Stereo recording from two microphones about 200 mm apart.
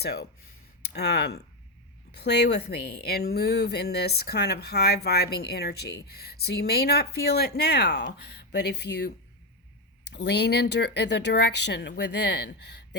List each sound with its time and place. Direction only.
0.0 s a woman's voice: 55° left (ahead or behind)